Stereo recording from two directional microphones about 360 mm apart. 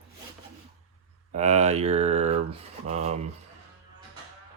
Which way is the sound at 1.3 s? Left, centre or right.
Centre.